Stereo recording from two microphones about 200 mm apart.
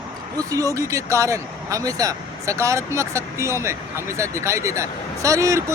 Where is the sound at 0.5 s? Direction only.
15° right (ahead or behind).